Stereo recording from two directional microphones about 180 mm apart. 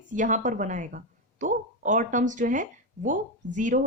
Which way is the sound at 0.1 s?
45° right (ahead or behind).